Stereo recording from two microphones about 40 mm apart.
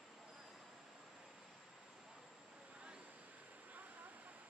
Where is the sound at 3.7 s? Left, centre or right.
Right.